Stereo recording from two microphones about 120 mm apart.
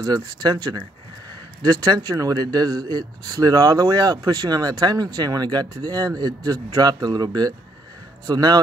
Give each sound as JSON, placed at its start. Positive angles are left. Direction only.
{"t": 0.0, "sound": "speech", "side_deg": -35}